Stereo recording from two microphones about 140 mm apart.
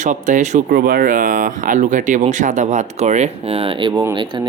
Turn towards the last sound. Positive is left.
turn(degrees=-30)  # may be behind; listen again after turning